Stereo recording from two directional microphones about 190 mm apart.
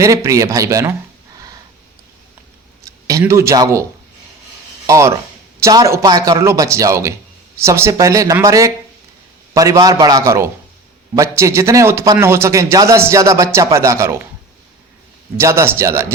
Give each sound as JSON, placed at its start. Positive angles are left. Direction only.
{"t": 0.0, "sound": "a man's voice", "side_deg": -15}
{"t": 2.8, "sound": "a man's voice", "side_deg": -15}
{"t": 4.9, "sound": "a man's voice", "side_deg": -15}
{"t": 15.4, "sound": "a man's voice", "side_deg": -15}